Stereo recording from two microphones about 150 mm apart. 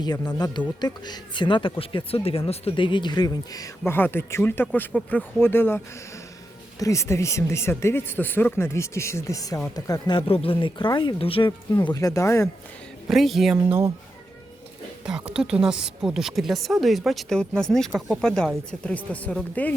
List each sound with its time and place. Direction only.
0.0 s speech: 25° left (ahead or behind)
11.8 s speech: 25° left (ahead or behind)
13.1 s speech: centre (ahead or behind)
15.0 s speech: 5° right (ahead or behind)